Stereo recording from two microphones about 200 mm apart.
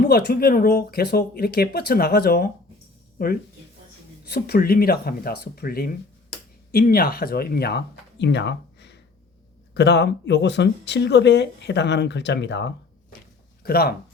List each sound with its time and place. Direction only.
0.1 s speech: 50° left (ahead or behind)